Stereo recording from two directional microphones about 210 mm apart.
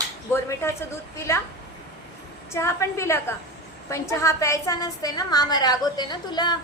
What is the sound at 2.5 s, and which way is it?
A woman's voice, 10° left (ahead or behind).